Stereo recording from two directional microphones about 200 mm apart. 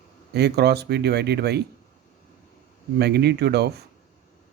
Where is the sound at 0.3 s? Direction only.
55° right (ahead or behind).